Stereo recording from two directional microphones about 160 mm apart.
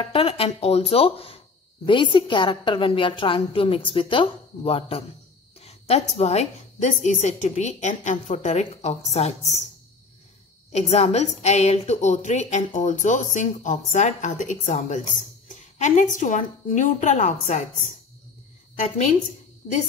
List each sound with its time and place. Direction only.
0.1 s a woman's voice: 35° left (ahead or behind)
10.7 s a woman's voice: 40° left (ahead or behind)